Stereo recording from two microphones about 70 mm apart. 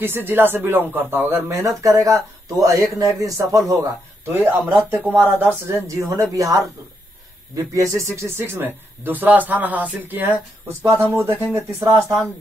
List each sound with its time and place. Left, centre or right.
0.0 s a man's voice: right
4.3 s speech: right
5.7 s a man's voice: right
11.5 s speech: right